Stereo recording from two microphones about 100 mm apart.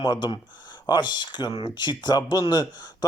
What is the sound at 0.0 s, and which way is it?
Speech, 45° left (ahead or behind).